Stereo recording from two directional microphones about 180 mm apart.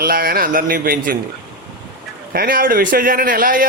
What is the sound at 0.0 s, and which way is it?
A man's voice, 55° right (ahead or behind).